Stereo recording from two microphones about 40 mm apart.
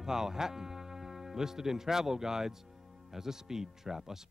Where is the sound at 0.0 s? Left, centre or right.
Centre.